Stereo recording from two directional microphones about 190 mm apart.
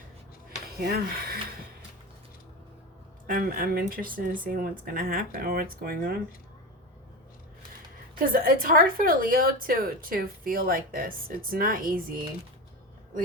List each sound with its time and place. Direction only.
0.8 s a woman's voice: 55° right (ahead or behind)
3.2 s a woman's voice: 50° right (ahead or behind)
8.1 s a woman's voice: 50° right (ahead or behind)